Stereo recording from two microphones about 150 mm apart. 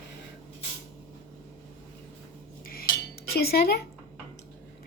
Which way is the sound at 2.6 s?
75° left (ahead or behind).